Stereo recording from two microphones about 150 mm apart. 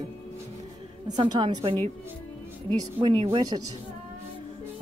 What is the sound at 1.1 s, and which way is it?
A woman's voice, 30° right (ahead or behind).